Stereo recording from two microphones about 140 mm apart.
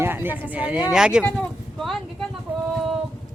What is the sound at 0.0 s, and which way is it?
Speech, 15° right (ahead or behind).